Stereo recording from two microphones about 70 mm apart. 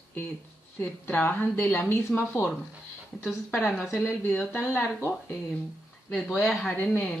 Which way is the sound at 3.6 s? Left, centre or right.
Centre.